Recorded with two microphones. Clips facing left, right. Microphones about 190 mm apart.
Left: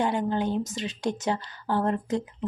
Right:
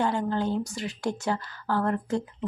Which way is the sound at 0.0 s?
15° left (ahead or behind).